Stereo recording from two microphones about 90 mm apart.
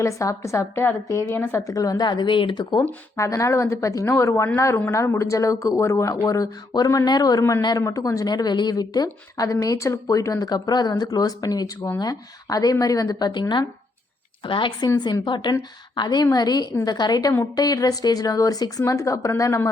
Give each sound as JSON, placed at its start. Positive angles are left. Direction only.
{"t": 0.0, "sound": "a woman's voice", "side_deg": 35}
{"t": 3.2, "sound": "speech", "side_deg": 35}
{"t": 7.6, "sound": "a woman's voice", "side_deg": 50}
{"t": 7.9, "sound": "a woman's voice", "side_deg": 40}
{"t": 14.9, "sound": "a woman's voice", "side_deg": 55}